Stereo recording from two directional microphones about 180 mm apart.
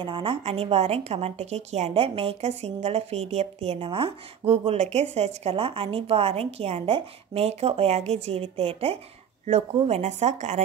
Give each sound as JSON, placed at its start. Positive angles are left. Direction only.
{"t": 0.0, "sound": "a woman's voice", "side_deg": -30}